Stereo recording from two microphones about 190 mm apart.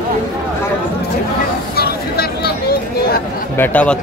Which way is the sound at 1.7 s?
55° left (ahead or behind).